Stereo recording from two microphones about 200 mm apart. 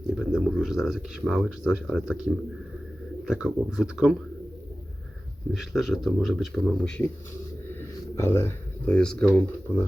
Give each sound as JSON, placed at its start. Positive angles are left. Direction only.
{"t": 0.2, "sound": "speech", "side_deg": 0}
{"t": 5.5, "sound": "speech", "side_deg": 0}
{"t": 7.8, "sound": "speech", "side_deg": 15}